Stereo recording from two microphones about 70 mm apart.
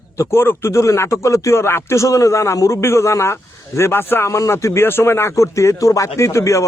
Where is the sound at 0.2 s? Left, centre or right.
Left.